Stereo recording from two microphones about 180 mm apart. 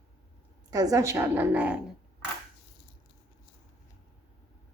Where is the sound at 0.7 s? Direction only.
20° right (ahead or behind).